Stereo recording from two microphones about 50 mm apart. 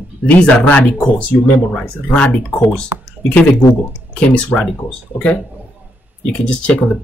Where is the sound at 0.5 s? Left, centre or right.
Left.